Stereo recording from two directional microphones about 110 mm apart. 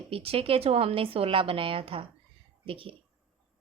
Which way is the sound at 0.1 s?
60° right (ahead or behind).